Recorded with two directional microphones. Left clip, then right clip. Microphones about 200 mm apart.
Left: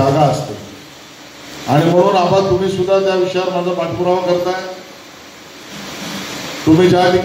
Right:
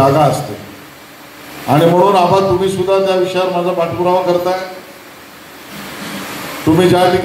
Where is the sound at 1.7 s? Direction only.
50° right (ahead or behind).